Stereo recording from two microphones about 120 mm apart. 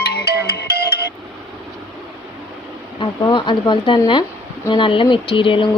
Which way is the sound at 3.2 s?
40° left (ahead or behind).